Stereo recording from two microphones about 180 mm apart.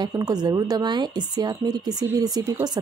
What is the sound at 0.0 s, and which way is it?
A woman's voice, 20° right (ahead or behind).